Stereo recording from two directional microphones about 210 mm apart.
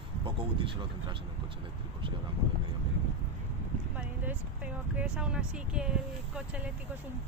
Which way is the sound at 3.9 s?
5° right (ahead or behind).